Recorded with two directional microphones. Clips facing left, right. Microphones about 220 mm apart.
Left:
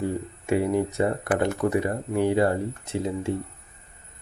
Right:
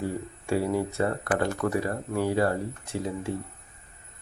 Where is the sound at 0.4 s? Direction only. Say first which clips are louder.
Left 3 dB; 20° left (ahead or behind).